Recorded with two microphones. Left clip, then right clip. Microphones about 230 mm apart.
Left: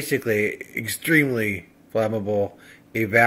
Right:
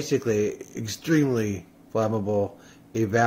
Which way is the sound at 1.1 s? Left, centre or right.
Centre.